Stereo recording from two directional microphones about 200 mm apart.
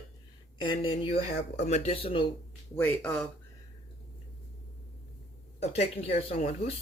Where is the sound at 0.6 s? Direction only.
25° left (ahead or behind).